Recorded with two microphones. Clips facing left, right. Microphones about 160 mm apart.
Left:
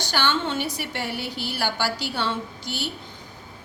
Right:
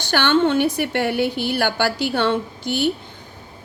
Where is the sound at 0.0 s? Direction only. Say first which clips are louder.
Right 8 dB; 60° right (ahead or behind).